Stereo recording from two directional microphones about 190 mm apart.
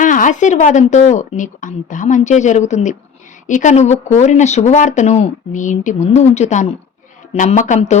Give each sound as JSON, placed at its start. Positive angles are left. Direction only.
{"t": 0.0, "sound": "speech", "side_deg": 45}